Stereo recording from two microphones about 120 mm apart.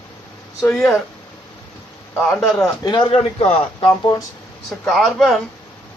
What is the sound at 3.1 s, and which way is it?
Speech, 60° left (ahead or behind).